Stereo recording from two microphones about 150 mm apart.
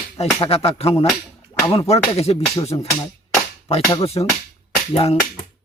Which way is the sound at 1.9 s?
40° left (ahead or behind).